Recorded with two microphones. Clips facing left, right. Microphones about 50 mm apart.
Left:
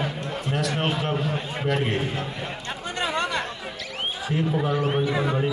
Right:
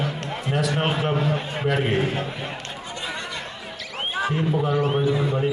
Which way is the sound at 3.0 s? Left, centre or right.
Left.